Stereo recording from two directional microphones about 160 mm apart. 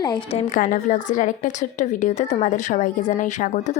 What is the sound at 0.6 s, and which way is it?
A woman's voice, 55° left (ahead or behind).